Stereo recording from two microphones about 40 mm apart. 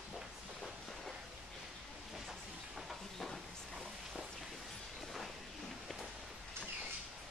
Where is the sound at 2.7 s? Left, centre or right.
Centre.